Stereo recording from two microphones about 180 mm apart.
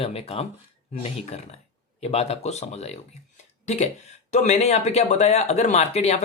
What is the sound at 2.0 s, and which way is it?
Speech, 35° left (ahead or behind).